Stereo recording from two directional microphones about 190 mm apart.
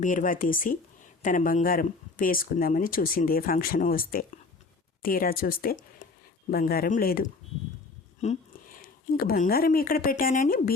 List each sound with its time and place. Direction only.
0.0 s speech: 45° left (ahead or behind)
8.2 s speech: 35° left (ahead or behind)
8.8 s speech: 50° left (ahead or behind)